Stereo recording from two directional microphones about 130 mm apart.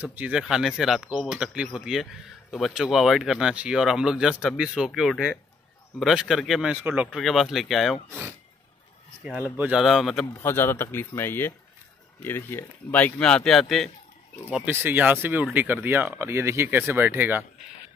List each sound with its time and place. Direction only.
0.0 s speech: 10° right (ahead or behind)
9.6 s speech: 5° right (ahead or behind)
10.3 s speech: 20° left (ahead or behind); by 13.8 s centre (ahead or behind)
14.6 s speech: 15° right (ahead or behind)